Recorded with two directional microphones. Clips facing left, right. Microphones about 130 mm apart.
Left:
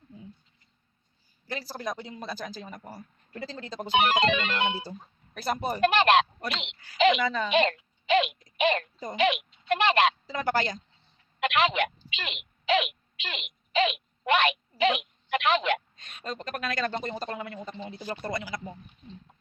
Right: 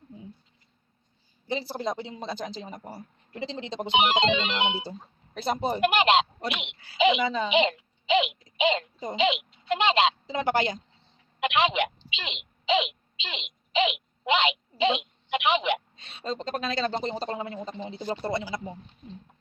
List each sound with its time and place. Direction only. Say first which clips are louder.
1.5 s speech: right 4 dB; 20° right (ahead or behind)
5.8 s speech: left 1 dB; 15° right (ahead or behind)
7.5 s a woman's voice: right 1 dB; 15° right (ahead or behind)
16.0 s speech: right 5 dB; 30° right (ahead or behind)